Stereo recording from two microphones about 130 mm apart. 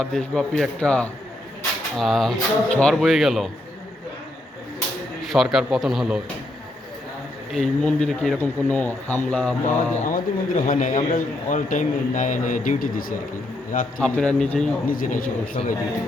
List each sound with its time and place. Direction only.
0.0 s speech: 5° left (ahead or behind)
5.2 s speech: centre (ahead or behind)
7.5 s speech: 5° left (ahead or behind)
9.6 s a man's voice: 80° left
14.0 s speech: 5° left (ahead or behind)
14.8 s a man's voice: 85° left
15.6 s a man's voice: 50° left (ahead or behind)